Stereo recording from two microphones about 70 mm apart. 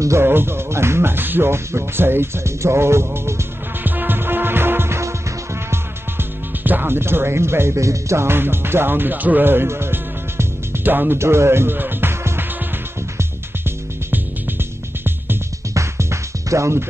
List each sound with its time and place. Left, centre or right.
0.2 s speech: right
3.8 s music: right
6.6 s speech: right
11.1 s music: right
15.7 s music: right